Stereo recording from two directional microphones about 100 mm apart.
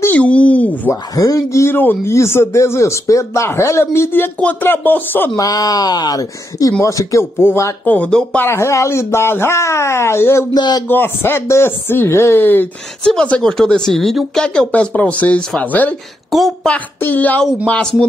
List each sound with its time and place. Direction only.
0.0 s a sound: 15° left (ahead or behind)
1.1 s a man's voice: 35° left (ahead or behind); by 5.3 s 20° left (ahead or behind)
5.3 s speech: 40° left (ahead or behind)
7.8 s speech: 15° left (ahead or behind)
8.4 s a man's voice: 25° left (ahead or behind)
10.5 s speech: 40° left (ahead or behind)
10.9 s a man's voice: 20° left (ahead or behind)
13.0 s speech: 10° left (ahead or behind)
16.3 s a woman's voice: centre (ahead or behind)
16.6 s speech: 15° left (ahead or behind)